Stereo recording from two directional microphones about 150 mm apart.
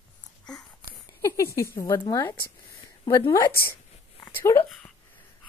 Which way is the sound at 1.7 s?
25° left (ahead or behind).